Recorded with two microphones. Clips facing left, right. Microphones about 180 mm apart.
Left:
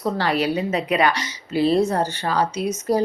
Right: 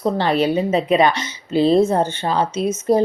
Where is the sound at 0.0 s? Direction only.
25° right (ahead or behind).